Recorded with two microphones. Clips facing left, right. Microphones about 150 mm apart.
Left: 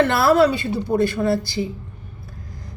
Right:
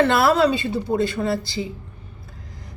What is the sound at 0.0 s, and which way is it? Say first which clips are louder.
Speech: even; 20° right (ahead or behind).